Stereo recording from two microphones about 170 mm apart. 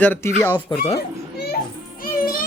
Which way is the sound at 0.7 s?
25° left (ahead or behind).